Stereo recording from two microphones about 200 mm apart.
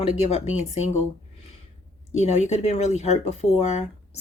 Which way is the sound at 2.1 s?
35° left (ahead or behind).